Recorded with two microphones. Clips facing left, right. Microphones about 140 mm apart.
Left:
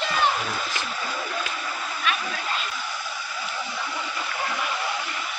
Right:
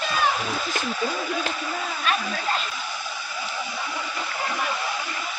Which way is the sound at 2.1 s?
35° right (ahead or behind).